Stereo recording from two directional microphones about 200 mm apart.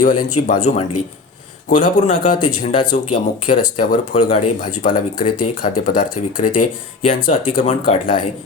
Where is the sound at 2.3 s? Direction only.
25° left (ahead or behind).